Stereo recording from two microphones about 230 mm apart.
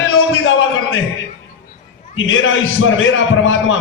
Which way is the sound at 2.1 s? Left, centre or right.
Left.